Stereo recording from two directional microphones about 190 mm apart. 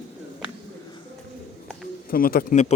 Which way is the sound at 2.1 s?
50° left (ahead or behind).